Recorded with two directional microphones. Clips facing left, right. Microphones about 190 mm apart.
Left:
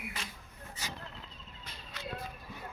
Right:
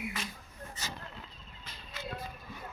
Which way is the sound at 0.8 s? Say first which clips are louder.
Even; 10° left (ahead or behind).